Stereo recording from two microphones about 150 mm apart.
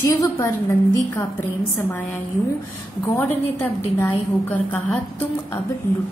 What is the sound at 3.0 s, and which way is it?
A woman's voice, 20° left (ahead or behind).